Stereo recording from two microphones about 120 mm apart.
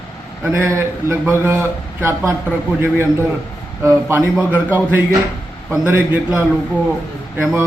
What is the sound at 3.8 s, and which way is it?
A man's voice, 20° right (ahead or behind).